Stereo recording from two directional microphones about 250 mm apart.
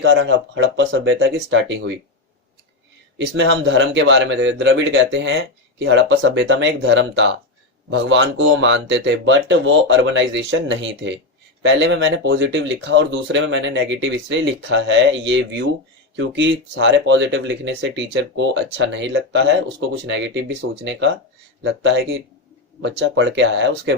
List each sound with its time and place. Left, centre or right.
0.0 s speech: right
3.2 s speech: right